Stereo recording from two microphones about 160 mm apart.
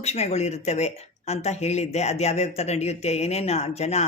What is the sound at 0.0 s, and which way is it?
Speech, 40° left (ahead or behind).